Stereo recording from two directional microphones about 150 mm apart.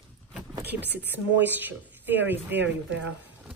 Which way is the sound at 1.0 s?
10° right (ahead or behind).